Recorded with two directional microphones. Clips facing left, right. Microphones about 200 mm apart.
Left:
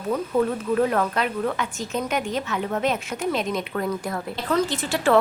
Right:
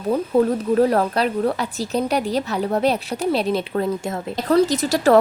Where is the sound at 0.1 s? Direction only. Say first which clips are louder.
Right 5 dB; 35° right (ahead or behind).